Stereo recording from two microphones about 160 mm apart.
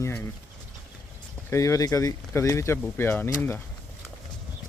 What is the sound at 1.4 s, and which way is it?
Speech, 20° left (ahead or behind).